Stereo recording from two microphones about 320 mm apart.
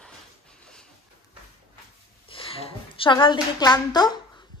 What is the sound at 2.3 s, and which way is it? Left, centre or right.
A woman's voice, centre.